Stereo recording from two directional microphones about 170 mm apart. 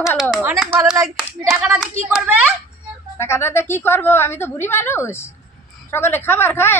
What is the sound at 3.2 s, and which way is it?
A woman's voice, 15° left (ahead or behind).